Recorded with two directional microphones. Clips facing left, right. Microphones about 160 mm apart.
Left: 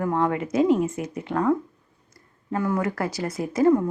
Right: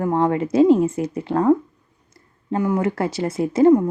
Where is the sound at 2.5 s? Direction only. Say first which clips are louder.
Right 4 dB; 20° right (ahead or behind).